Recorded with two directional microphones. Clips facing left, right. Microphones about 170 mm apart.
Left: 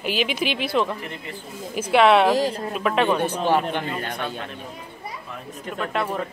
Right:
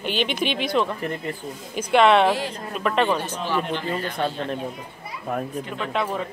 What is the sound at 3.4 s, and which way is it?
Speech, 55° left (ahead or behind).